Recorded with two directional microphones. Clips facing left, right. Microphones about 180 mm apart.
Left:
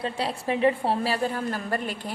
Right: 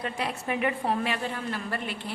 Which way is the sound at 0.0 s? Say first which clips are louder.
Left 3 dB; 30° left (ahead or behind).